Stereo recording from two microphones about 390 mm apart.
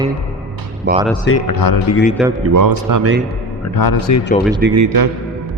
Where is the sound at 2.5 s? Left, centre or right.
Right.